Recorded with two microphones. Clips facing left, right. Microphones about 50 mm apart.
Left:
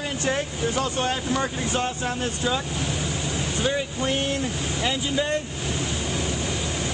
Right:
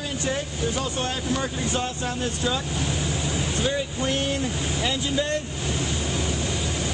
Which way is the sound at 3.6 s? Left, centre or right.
Centre.